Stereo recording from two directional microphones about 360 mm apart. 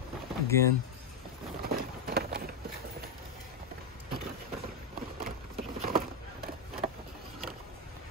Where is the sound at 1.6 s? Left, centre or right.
Right.